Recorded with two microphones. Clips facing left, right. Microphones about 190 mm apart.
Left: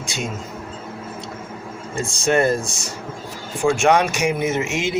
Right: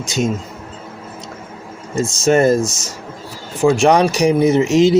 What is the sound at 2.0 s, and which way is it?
Speech, 40° right (ahead or behind).